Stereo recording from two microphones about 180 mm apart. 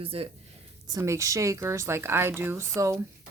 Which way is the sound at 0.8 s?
20° right (ahead or behind).